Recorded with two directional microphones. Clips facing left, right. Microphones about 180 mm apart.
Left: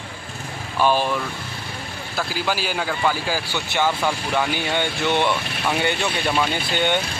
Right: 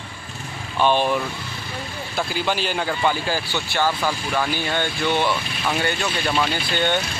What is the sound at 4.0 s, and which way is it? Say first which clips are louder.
Speech: left 1 dB; 15° left (ahead or behind).